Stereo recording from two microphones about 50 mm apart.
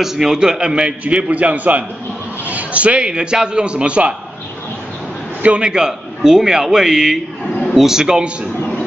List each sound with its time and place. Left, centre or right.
0.0 s a man's voice: centre; by 4.1 s right
5.4 s a man's voice: right